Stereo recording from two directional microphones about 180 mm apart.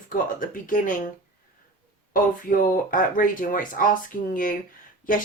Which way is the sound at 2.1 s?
50° left (ahead or behind).